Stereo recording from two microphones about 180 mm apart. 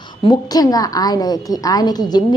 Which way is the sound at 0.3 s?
20° left (ahead or behind).